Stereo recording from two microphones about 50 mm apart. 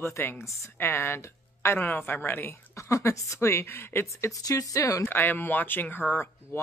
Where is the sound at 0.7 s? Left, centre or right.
Left.